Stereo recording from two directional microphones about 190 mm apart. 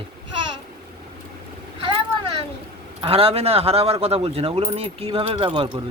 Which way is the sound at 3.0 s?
30° right (ahead or behind).